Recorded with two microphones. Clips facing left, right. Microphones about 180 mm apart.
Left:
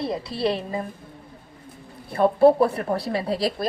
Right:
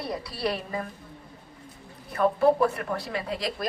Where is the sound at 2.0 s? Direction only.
30° left (ahead or behind).